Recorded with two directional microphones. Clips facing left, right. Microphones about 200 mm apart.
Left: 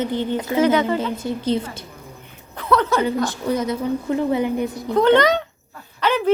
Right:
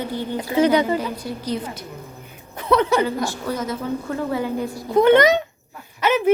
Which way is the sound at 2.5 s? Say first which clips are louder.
Right 1 dB; 15° right (ahead or behind).